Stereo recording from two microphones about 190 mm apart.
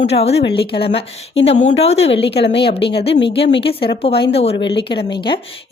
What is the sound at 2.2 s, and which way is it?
Speech, 60° left (ahead or behind).